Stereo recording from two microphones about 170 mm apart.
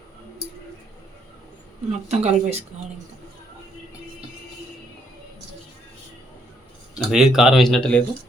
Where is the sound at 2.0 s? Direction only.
40° right (ahead or behind).